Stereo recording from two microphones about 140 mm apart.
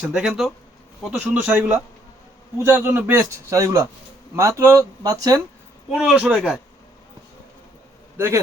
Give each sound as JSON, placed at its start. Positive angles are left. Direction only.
{"t": 0.1, "sound": "speech", "side_deg": -5}
{"t": 1.2, "sound": "a man's voice", "side_deg": -15}
{"t": 5.9, "sound": "speech", "side_deg": -5}